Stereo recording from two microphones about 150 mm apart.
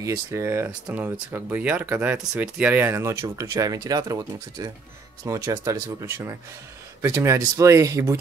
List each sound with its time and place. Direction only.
0.0 s speech: 15° right (ahead or behind)